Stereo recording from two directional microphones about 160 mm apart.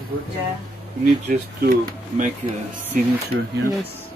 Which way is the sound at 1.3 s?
60° right (ahead or behind).